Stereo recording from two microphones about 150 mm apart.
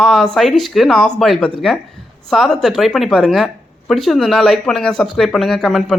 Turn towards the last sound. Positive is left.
turn(degrees=5)  # may be behind; listen again after turning